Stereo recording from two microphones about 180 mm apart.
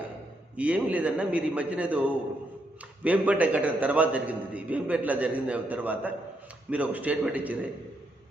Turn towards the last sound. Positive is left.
turn(degrees=-10)  # may be behind; listen again after turning